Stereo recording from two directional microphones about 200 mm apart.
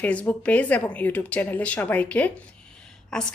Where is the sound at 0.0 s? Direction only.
5° left (ahead or behind).